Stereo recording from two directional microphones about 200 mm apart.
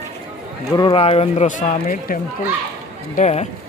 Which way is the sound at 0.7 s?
25° left (ahead or behind).